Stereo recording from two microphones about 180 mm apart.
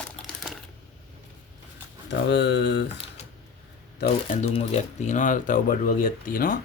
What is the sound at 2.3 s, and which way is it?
Speech, 80° left.